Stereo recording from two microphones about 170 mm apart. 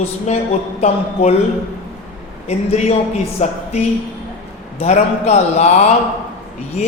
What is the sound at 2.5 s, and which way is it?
A woman's voice, 40° left (ahead or behind).